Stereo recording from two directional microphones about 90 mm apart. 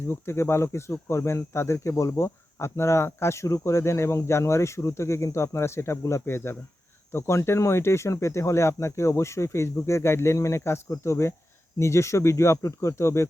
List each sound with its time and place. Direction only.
0.1 s speech: 30° left (ahead or behind)